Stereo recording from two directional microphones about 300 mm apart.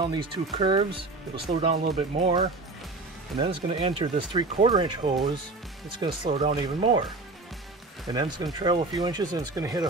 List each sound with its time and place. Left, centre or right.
0.0 s speech: centre
8.1 s speech: centre